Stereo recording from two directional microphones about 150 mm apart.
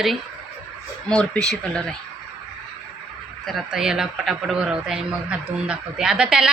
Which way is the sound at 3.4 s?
Centre (ahead or behind).